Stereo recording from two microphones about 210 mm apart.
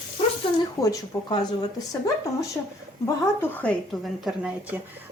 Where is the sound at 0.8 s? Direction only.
15° left (ahead or behind).